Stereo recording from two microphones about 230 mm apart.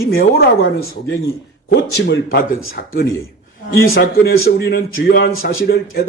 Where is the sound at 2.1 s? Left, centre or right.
Left.